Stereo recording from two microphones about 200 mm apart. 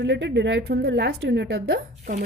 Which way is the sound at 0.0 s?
60° right (ahead or behind).